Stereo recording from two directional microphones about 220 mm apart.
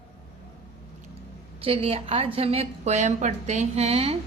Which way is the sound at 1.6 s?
25° right (ahead or behind).